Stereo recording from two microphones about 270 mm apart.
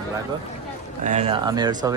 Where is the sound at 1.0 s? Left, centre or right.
Right.